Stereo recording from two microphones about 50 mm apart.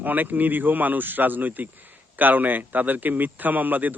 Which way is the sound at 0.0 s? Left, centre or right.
Right.